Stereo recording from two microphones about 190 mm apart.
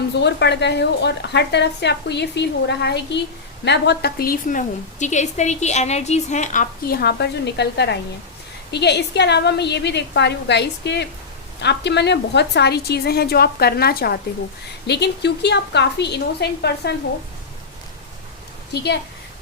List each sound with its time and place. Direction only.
0.2 s a woman's voice: 65° left (ahead or behind)